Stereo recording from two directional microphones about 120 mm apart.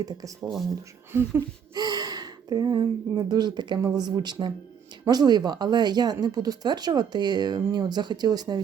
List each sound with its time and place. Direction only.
0.0 s speech: 30° right (ahead or behind)
1.7 s speech: 35° right (ahead or behind)